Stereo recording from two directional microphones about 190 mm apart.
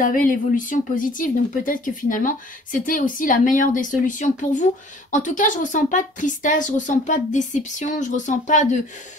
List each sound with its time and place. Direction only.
0.0 s speech: 45° left (ahead or behind)